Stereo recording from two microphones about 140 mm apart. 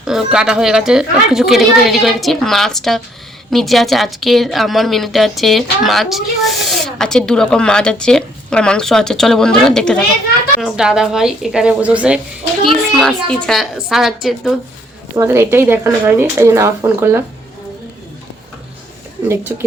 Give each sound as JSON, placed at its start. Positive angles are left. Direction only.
{"t": 0.0, "sound": "speech", "side_deg": -5}
{"t": 12.9, "sound": "speech", "side_deg": 5}
{"t": 15.1, "sound": "speech", "side_deg": -20}
{"t": 19.3, "sound": "speech", "side_deg": -20}